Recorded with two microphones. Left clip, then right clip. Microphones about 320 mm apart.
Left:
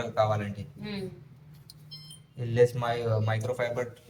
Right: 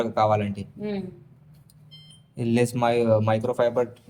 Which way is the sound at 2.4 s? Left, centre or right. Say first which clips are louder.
Right 2 dB; right.